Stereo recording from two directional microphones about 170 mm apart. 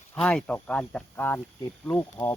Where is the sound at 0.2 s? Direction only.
5° left (ahead or behind).